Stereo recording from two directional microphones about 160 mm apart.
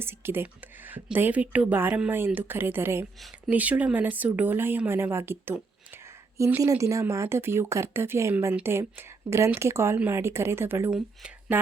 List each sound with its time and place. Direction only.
0.0 s speech: 15° right (ahead or behind)